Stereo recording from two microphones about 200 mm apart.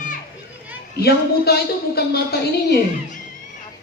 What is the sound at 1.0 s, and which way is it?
A woman's voice, 55° left (ahead or behind).